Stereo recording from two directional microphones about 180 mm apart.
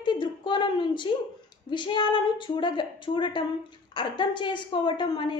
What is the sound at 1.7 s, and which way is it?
A woman's voice, 25° left (ahead or behind).